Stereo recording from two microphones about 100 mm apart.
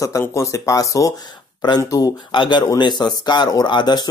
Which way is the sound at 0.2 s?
30° left (ahead or behind).